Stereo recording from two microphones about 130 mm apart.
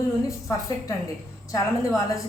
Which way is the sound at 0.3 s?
25° left (ahead or behind).